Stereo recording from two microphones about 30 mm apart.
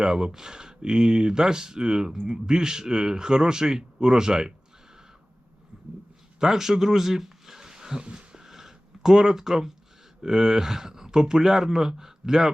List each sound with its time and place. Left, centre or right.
0.0 s speech: right
5.7 s a sound: right
6.4 s speech: centre
8.1 s dog: right
8.4 s a sound: centre
10.2 s speech: right